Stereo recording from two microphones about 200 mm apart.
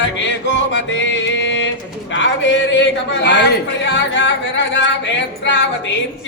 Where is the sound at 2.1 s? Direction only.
65° left (ahead or behind).